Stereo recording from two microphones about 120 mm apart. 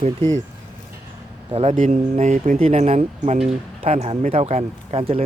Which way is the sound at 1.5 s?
65° right (ahead or behind).